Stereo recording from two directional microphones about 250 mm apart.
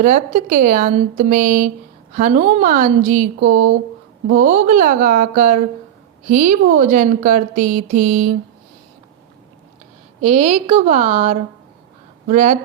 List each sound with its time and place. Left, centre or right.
0.0 s a woman's voice: right
10.2 s a woman's voice: right